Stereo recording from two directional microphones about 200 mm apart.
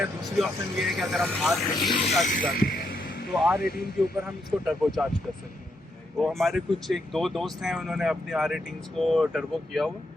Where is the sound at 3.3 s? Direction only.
5° right (ahead or behind).